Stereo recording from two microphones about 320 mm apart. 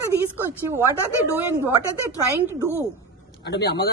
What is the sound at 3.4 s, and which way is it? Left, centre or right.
Speech, left.